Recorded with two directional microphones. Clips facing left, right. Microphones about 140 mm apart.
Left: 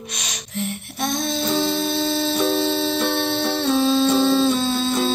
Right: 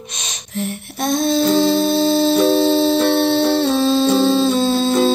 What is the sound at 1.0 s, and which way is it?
Female singing, 35° right (ahead or behind).